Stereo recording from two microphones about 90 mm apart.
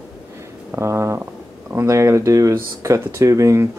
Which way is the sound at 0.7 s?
30° right (ahead or behind).